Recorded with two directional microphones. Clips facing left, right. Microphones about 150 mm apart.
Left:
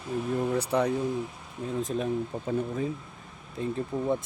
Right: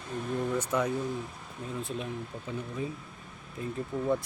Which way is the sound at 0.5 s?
35° left (ahead or behind).